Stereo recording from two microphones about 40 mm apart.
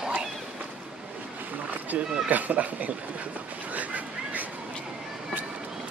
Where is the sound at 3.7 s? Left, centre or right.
Right.